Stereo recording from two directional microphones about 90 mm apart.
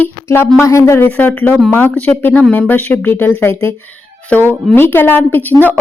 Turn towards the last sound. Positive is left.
turn(degrees=20)  # may be behind; listen again after turning